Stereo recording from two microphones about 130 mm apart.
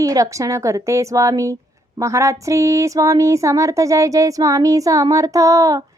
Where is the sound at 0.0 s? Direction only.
25° right (ahead or behind).